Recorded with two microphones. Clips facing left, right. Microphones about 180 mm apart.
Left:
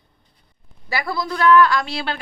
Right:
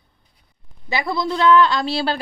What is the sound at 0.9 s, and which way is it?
A woman's voice, 20° right (ahead or behind).